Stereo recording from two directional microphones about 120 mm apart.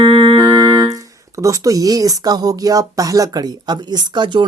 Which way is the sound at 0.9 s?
25° right (ahead or behind).